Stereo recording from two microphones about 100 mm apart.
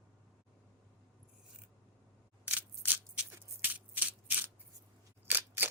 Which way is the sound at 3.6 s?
15° right (ahead or behind).